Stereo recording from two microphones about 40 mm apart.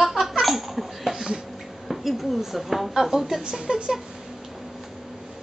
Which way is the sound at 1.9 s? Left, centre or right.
Centre.